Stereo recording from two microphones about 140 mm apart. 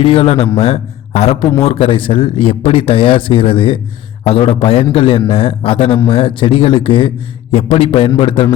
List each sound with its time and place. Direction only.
0.0 s a man's voice: 45° left (ahead or behind)